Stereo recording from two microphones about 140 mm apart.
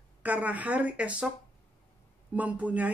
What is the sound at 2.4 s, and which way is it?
Speech, 10° right (ahead or behind).